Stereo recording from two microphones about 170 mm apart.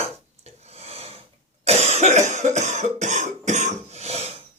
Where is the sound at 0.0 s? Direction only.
40° right (ahead or behind).